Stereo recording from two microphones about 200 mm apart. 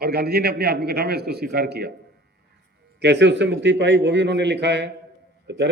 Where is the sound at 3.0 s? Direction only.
60° right (ahead or behind).